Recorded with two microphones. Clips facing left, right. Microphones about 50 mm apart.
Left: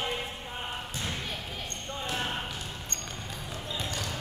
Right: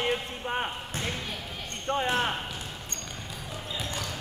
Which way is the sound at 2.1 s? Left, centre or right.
Right.